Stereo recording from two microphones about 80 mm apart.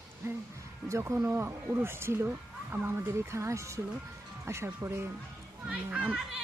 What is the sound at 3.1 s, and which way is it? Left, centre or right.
Speech, right.